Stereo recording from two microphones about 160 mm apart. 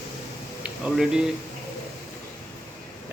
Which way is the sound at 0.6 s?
5° right (ahead or behind).